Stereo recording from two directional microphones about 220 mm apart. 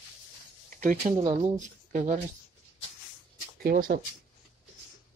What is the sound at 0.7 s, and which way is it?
Speech, 35° right (ahead or behind).